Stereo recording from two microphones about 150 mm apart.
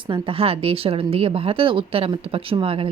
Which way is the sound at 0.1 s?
40° right (ahead or behind).